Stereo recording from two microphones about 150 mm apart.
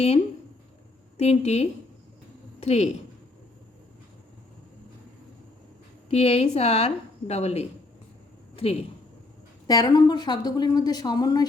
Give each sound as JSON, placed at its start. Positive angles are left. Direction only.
{"t": 1.1, "sound": "a woman's voice", "side_deg": 45}
{"t": 6.1, "sound": "a woman's voice", "side_deg": 45}
{"t": 9.6, "sound": "a woman's voice", "side_deg": 25}